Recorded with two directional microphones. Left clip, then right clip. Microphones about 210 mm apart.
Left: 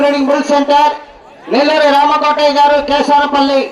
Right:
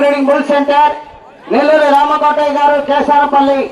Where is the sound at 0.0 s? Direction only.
Centre (ahead or behind).